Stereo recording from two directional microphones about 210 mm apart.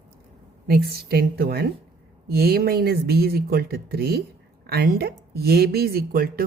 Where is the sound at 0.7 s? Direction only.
45° right (ahead or behind).